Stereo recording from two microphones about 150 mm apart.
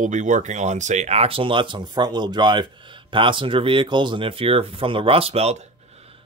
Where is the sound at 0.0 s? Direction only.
55° right (ahead or behind).